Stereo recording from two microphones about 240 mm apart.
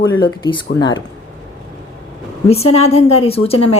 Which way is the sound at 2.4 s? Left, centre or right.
Left.